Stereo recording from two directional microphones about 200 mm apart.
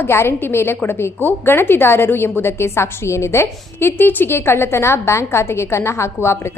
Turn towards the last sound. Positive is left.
turn(degrees=15)  # may be behind; listen again after turning